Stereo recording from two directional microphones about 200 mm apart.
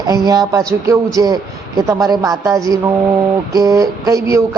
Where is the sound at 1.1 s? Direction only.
20° right (ahead or behind).